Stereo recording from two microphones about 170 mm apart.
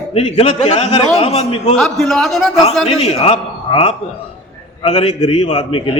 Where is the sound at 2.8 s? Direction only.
35° left (ahead or behind).